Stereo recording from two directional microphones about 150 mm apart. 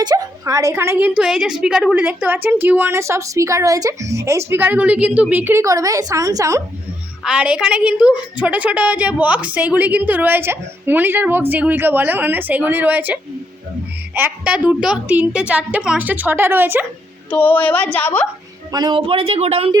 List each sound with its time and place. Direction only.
0.0 s a woman's voice: 25° right (ahead or behind)
7.3 s a woman's voice: 5° right (ahead or behind)
17.3 s a woman's voice: 10° left (ahead or behind)
18.7 s speech: 30° right (ahead or behind)